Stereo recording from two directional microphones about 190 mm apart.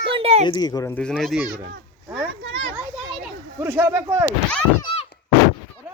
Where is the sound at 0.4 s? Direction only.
20° left (ahead or behind).